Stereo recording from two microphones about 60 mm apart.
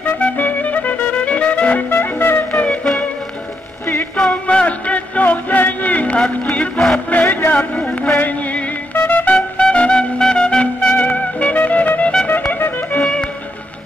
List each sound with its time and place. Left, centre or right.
0.2 s music: left
2.5 s music: left
3.8 s music: left
4.3 s music: centre; by 7.5 s left
7.5 s a sound: left
8.2 s music: left
8.9 s music: left
9.2 s music: left
13.0 s music: centre